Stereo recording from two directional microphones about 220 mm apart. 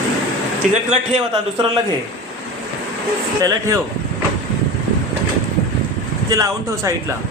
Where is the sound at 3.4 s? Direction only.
15° right (ahead or behind).